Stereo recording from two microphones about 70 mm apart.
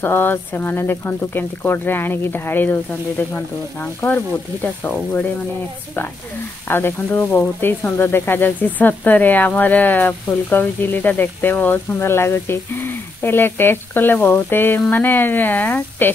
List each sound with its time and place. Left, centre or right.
0.0 s speech: left
6.7 s speech: left
7.2 s frying: left
8.0 s speech: left